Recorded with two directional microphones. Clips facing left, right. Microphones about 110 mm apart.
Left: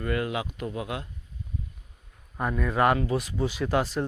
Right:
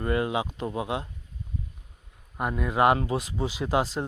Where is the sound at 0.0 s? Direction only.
25° right (ahead or behind).